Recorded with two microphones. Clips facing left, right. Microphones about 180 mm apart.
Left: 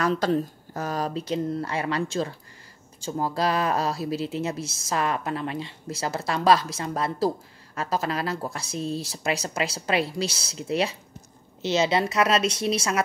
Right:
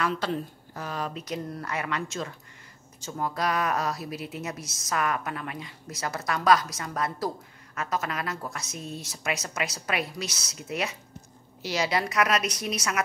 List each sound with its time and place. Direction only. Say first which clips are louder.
0.0 s speech: left 5 dB; 40° left (ahead or behind)